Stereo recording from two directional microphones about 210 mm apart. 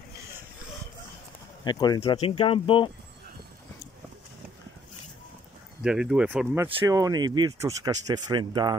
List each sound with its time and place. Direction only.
1.6 s speech: 20° left (ahead or behind)
5.8 s speech: 5° right (ahead or behind); by 8.7 s 20° right (ahead or behind)